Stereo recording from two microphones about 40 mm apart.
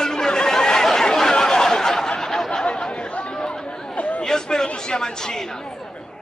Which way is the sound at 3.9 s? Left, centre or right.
Left.